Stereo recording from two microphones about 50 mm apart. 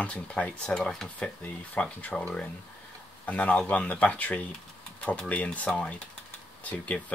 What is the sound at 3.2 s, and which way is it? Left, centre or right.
Speech, left.